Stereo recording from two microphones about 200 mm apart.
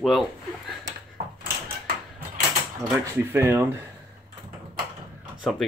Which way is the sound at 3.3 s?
10° right (ahead or behind).